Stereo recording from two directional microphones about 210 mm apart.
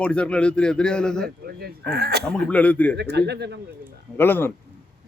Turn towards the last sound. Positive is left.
turn(degrees=10)  # may be behind; listen again after turning